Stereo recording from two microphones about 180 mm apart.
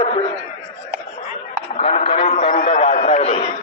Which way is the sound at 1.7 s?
35° left (ahead or behind).